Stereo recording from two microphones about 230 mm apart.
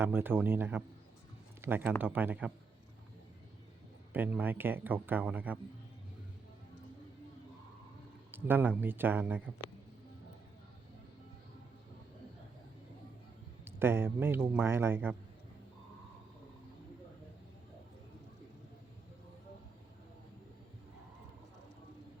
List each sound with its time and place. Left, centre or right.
0.0 s speech: centre
4.1 s speech: centre
8.3 s speech: centre
13.7 s speech: centre